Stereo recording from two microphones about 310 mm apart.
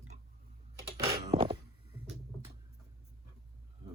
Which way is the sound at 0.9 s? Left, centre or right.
Centre.